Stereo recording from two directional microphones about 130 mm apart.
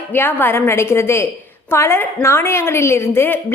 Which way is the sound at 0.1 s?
15° left (ahead or behind).